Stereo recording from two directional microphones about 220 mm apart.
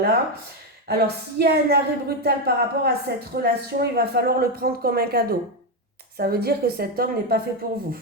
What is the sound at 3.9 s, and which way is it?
A woman's voice, 45° right (ahead or behind).